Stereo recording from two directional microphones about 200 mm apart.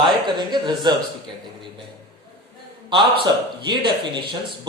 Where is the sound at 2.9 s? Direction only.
25° right (ahead or behind).